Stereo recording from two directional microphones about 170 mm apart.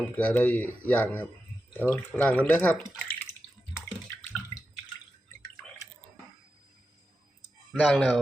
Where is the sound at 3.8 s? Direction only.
15° left (ahead or behind).